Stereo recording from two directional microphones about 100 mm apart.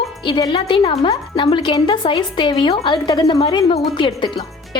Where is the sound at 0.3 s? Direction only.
50° left (ahead or behind).